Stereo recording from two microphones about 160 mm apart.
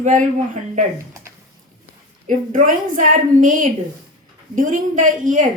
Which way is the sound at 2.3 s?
55° right (ahead or behind).